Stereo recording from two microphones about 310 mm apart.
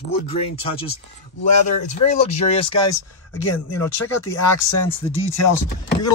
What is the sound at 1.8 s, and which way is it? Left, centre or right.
Speech, left.